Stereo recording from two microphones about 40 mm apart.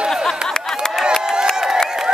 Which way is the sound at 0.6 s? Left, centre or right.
Centre.